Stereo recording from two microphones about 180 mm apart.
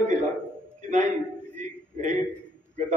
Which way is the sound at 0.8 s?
40° right (ahead or behind).